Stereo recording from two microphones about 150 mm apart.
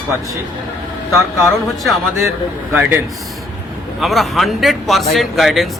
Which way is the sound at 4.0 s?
Centre (ahead or behind).